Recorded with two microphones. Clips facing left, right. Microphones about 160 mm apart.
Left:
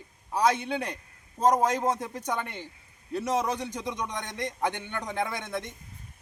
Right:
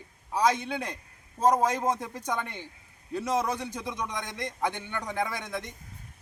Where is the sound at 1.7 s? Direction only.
10° right (ahead or behind).